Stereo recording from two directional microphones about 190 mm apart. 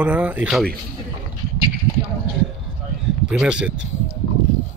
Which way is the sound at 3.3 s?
5° right (ahead or behind).